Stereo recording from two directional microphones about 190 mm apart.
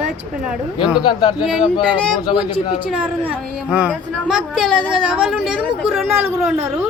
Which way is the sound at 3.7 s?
5° right (ahead or behind).